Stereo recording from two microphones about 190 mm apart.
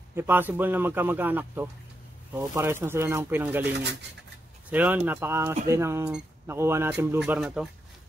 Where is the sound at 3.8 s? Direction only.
65° right (ahead or behind).